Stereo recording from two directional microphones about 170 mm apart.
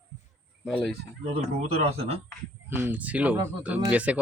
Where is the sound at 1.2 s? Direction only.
35° right (ahead or behind).